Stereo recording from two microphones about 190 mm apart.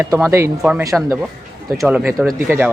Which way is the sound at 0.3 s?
15° right (ahead or behind).